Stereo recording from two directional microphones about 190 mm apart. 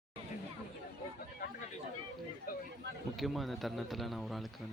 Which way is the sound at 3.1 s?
Centre (ahead or behind).